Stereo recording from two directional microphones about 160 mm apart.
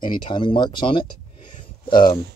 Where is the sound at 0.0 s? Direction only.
30° left (ahead or behind).